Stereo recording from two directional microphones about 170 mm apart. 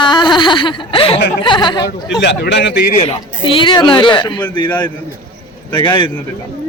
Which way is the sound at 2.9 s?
35° left (ahead or behind).